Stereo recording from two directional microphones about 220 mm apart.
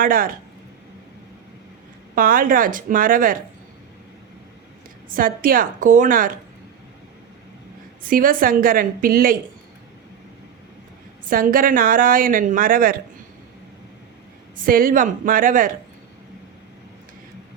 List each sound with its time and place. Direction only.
0.0 s speech: 40° right (ahead or behind)
2.1 s speech: 40° right (ahead or behind)
5.0 s speech: 40° right (ahead or behind)
8.0 s speech: 40° right (ahead or behind)
11.3 s speech: 40° right (ahead or behind)
14.5 s speech: 40° right (ahead or behind)